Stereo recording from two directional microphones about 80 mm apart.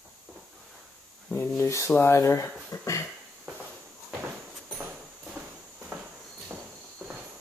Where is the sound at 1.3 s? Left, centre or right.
Left.